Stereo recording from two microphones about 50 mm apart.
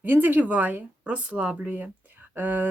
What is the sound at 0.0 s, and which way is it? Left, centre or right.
Speech, right.